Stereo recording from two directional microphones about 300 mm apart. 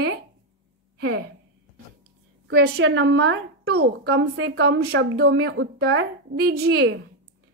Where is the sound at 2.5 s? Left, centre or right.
Right.